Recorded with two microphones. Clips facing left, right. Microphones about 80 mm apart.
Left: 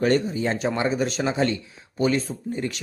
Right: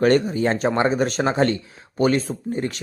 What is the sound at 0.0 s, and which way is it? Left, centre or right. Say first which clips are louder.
Speech: right 4 dB; right.